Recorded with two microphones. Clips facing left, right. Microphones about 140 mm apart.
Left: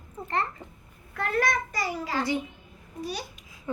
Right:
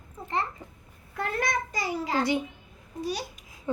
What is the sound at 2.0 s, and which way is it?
Speech, 15° right (ahead or behind).